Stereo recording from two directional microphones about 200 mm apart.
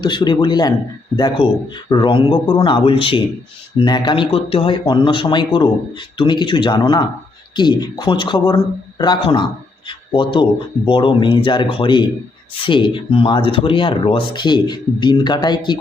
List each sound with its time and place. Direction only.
0.0 s speech: 20° left (ahead or behind)